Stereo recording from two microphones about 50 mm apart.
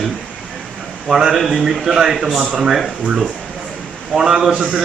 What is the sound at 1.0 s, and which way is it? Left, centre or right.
Speech, centre.